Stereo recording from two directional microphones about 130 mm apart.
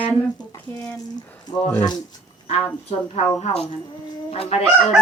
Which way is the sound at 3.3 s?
55° left (ahead or behind).